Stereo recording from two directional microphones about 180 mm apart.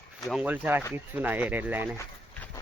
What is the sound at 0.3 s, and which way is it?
Speech, 5° right (ahead or behind).